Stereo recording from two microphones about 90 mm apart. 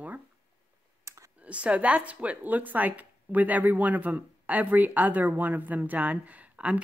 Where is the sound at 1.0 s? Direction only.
35° right (ahead or behind).